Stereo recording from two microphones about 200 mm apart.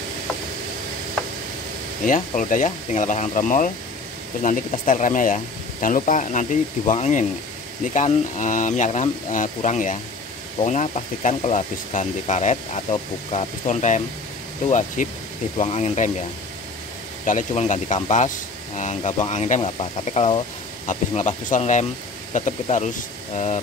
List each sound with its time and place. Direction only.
2.0 s speech: 40° left (ahead or behind)
17.3 s speech: 40° left (ahead or behind)